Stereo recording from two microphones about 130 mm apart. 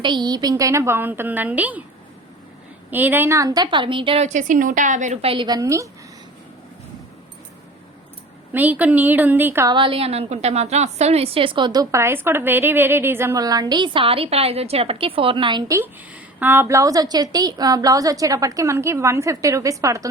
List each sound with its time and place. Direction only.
0.0 s a woman's voice: 35° right (ahead or behind); by 1.8 s 10° right (ahead or behind)
2.9 s a woman's voice: 15° right (ahead or behind); by 4.2 s 40° right (ahead or behind)
4.2 s a woman's voice: 70° right (ahead or behind); by 5.5 s 45° right (ahead or behind)
5.5 s a woman's voice: 25° right (ahead or behind)
8.5 s speech: 10° right (ahead or behind)
9.6 s a woman's voice: 40° right (ahead or behind)
15.6 s a woman's voice: 25° right (ahead or behind)